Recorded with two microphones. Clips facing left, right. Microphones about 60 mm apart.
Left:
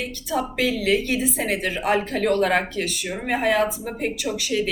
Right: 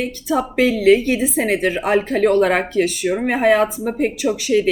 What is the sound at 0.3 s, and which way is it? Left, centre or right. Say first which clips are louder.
A woman's voice: right 6 dB; right.